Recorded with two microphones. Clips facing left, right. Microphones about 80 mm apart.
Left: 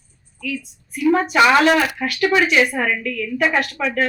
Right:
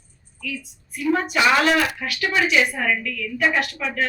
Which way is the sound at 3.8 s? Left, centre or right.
Left.